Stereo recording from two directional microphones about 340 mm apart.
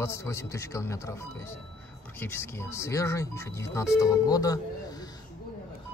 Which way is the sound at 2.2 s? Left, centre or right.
Centre.